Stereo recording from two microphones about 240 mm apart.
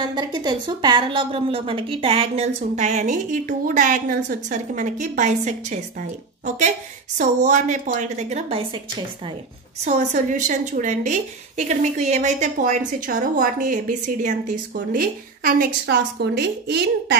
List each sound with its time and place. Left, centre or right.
0.1 s a woman's voice: centre
7.2 s a woman's voice: right
9.8 s a woman's voice: right